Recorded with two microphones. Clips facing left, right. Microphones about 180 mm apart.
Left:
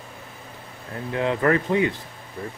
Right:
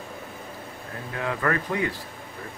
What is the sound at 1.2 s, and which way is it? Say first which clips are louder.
Speech: left 6 dB; 25° left (ahead or behind).